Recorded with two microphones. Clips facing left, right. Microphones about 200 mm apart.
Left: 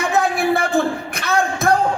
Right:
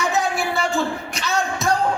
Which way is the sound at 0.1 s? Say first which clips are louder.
Left 5 dB; 55° left (ahead or behind).